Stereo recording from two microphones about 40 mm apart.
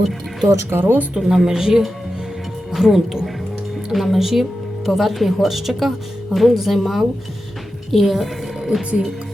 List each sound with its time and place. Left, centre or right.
0.4 s speech: right
1.1 s speech: centre